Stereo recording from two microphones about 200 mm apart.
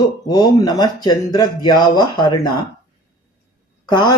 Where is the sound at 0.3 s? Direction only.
20° left (ahead or behind).